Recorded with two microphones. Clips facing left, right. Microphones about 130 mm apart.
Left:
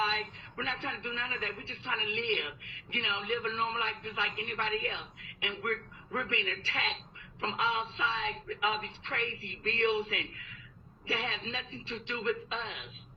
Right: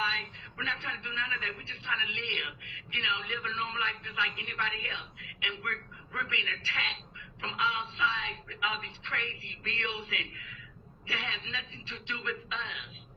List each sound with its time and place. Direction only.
0.0 s a woman's voice: 40° left (ahead or behind)